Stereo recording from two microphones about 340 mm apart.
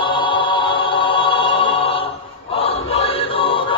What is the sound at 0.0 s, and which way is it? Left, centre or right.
Choir, centre.